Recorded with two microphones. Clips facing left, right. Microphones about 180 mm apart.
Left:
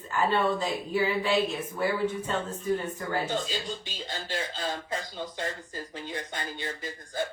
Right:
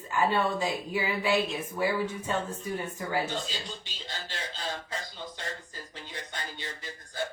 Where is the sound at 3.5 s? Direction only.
50° left (ahead or behind).